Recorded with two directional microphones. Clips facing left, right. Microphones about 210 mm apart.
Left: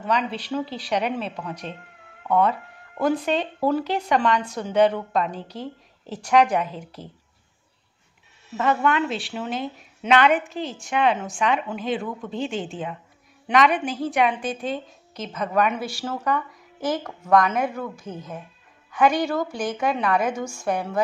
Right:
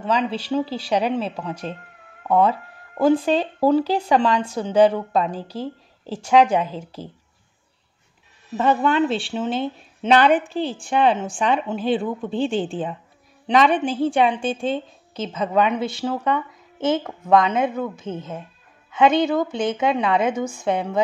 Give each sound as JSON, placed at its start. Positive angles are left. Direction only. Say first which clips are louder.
{"t": 0.0, "sound": "a woman's voice", "louder": "right 3 dB", "side_deg": -30}
{"t": 8.5, "sound": "a woman's voice", "louder": "right 3 dB", "side_deg": -30}